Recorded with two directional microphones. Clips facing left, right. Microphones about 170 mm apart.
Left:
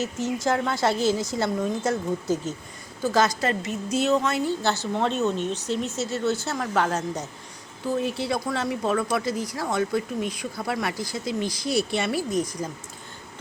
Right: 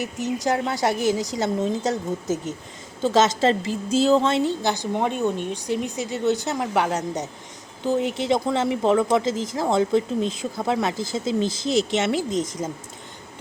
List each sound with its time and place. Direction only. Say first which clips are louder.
0.0 s a woman's voice: right 1 dB; 15° right (ahead or behind)